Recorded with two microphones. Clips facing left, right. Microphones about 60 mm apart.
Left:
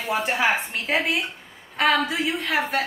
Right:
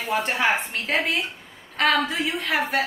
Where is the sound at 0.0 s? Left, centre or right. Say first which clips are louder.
Even; centre.